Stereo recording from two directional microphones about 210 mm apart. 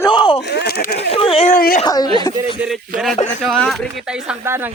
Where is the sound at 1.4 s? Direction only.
40° left (ahead or behind).